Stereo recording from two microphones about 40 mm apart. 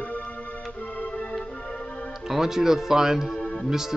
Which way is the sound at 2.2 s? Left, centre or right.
Centre.